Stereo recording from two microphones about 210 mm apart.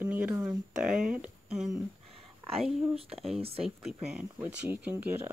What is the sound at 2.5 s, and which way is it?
Whispering, centre (ahead or behind).